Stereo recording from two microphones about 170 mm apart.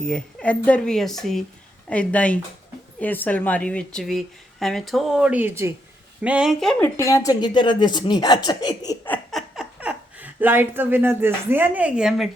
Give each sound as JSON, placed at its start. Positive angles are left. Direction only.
{"t": 0.0, "sound": "a woman's voice", "side_deg": 5}
{"t": 9.3, "sound": "speech", "side_deg": -5}